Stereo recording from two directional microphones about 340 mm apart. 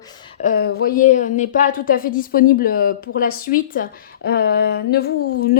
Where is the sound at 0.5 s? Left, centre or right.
Left.